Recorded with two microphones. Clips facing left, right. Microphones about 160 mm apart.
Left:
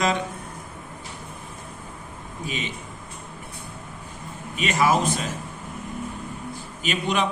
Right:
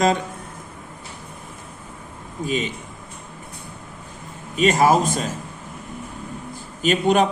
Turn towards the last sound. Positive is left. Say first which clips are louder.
# right 7 dB
turn(degrees=-45)  # may be behind; listen again after turning